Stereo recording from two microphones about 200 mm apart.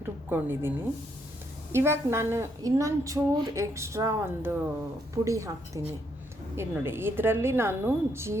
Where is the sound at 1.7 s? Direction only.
10° right (ahead or behind).